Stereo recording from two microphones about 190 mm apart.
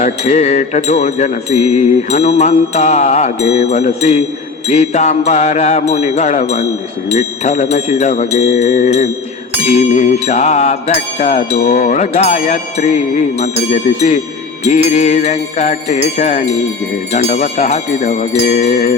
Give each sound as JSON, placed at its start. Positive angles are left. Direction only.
{"t": 0.0, "sound": "music", "side_deg": 35}